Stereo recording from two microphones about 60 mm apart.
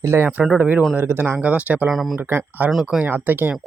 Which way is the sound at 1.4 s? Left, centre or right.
Right.